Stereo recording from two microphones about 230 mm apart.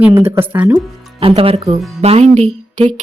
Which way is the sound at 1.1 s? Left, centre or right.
Right.